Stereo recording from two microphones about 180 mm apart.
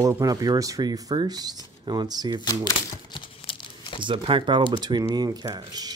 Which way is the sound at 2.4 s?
25° left (ahead or behind).